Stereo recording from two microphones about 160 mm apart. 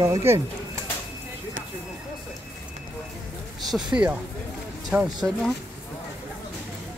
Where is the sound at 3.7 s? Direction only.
5° right (ahead or behind).